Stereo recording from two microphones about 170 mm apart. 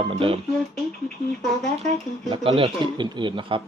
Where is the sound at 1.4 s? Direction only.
Centre (ahead or behind).